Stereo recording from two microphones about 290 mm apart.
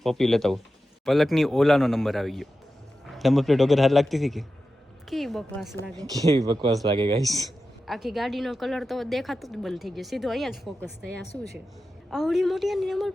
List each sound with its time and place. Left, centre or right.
0.0 s speech: centre
6.4 s speech: centre
7.9 s speech: centre
12.1 s speech: centre